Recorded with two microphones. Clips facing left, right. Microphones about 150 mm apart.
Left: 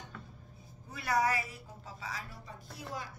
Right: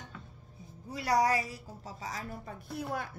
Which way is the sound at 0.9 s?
35° right (ahead or behind).